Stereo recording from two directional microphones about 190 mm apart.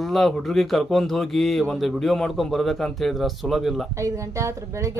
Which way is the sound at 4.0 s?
15° right (ahead or behind).